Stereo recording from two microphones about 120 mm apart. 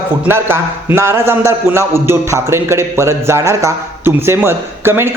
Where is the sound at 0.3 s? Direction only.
20° right (ahead or behind).